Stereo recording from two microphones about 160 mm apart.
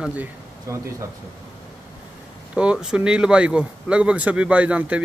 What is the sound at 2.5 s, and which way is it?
A man's voice, 5° right (ahead or behind).